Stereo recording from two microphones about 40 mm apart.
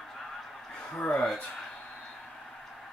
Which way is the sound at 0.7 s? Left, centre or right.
Centre.